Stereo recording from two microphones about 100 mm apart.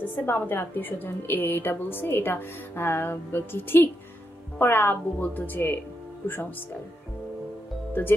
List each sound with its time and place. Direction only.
0.0 s a woman's voice: 20° left (ahead or behind)